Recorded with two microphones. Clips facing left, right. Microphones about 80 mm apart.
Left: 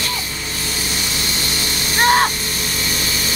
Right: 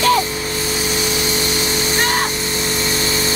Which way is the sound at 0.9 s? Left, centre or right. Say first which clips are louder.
Right 5 dB; centre.